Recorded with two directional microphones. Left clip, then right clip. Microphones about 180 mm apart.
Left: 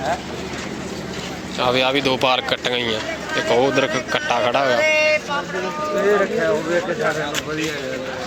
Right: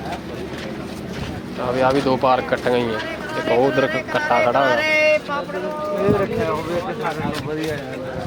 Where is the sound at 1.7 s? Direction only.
10° left (ahead or behind).